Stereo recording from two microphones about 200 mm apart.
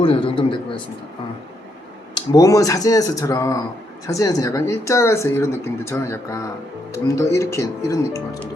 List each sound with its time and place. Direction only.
0.0 s speech: 25° left (ahead or behind)
2.1 s speech: 20° left (ahead or behind)